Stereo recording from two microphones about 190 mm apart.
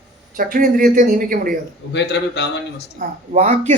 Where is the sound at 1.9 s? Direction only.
65° left (ahead or behind).